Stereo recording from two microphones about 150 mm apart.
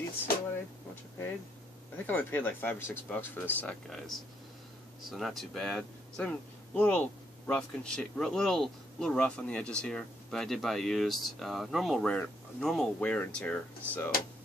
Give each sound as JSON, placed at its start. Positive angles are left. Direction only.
{"t": 2.0, "sound": "speech", "side_deg": 10}